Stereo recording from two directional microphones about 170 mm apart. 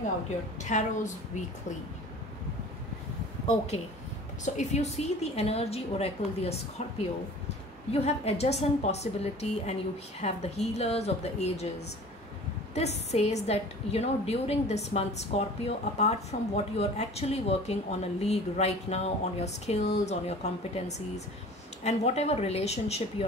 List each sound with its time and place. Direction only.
0.7 s a woman's voice: 45° left (ahead or behind)
3.7 s a woman's voice: 40° left (ahead or behind)
12.7 s a woman's voice: 40° left (ahead or behind)
21.8 s a woman's voice: 40° left (ahead or behind)